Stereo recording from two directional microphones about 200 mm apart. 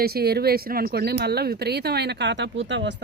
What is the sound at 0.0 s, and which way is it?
A woman's voice, 50° right (ahead or behind).